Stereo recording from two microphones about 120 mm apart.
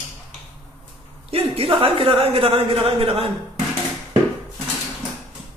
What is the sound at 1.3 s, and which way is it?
Speech, 55° right (ahead or behind).